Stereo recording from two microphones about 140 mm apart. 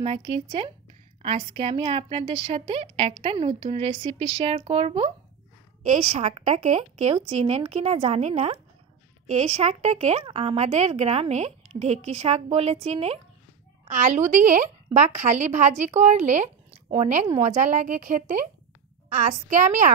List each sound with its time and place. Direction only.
0.0 s a woman's voice: 40° right (ahead or behind)
5.9 s a woman's voice: 55° right (ahead or behind)
13.8 s speech: 60° right (ahead or behind)